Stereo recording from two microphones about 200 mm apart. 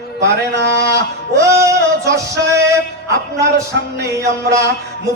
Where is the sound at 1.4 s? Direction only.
15° right (ahead or behind).